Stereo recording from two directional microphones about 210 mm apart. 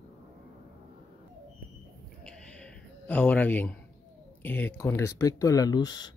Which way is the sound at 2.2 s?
5° left (ahead or behind).